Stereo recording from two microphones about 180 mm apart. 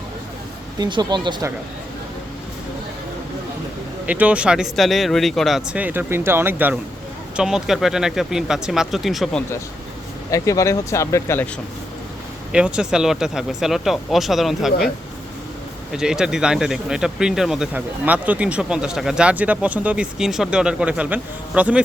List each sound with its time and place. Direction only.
0.8 s speech: 25° right (ahead or behind)
4.0 s speech: 10° right (ahead or behind)
10.3 s speech: 20° left (ahead or behind)
12.5 s speech: 5° right (ahead or behind)
15.9 s speech: 5° right (ahead or behind)